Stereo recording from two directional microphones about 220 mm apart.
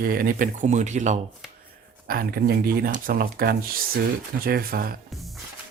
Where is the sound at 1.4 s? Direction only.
Centre (ahead or behind).